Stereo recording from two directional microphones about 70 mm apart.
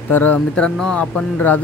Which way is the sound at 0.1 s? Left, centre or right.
Left.